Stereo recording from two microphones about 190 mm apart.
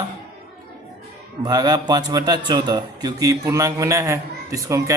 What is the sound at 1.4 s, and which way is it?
A man's voice, 20° right (ahead or behind).